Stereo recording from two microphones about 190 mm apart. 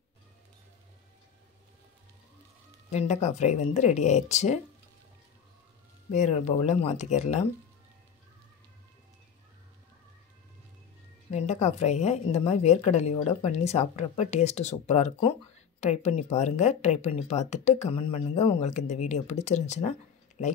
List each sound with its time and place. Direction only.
2.9 s a woman's voice: 35° left (ahead or behind)
6.1 s a woman's voice: 35° left (ahead or behind)
11.2 s a woman's voice: 35° left (ahead or behind)